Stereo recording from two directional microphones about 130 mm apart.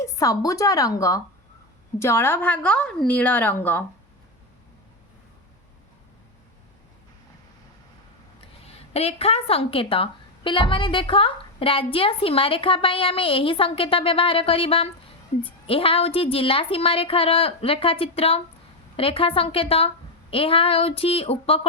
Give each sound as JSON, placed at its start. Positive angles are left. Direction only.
{"t": 0.0, "sound": "a woman's voice", "side_deg": 25}
{"t": 8.9, "sound": "speech", "side_deg": 50}